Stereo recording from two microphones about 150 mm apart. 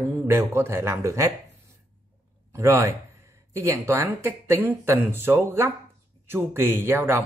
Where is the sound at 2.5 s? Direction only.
20° right (ahead or behind).